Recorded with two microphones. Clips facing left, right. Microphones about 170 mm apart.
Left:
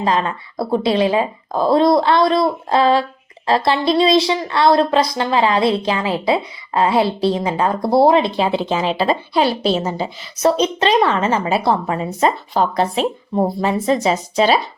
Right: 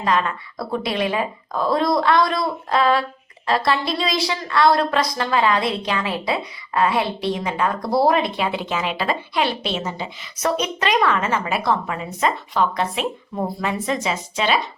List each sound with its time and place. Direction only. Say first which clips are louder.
0.0 s speech: left 3 dB; 30° left (ahead or behind)